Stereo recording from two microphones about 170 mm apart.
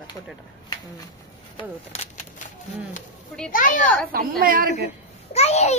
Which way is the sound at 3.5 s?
55° left (ahead or behind).